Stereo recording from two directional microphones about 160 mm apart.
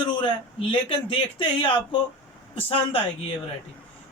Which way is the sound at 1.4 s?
30° left (ahead or behind).